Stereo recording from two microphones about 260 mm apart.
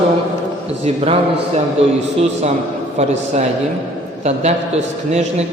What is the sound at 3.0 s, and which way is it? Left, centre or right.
A man's voice, right.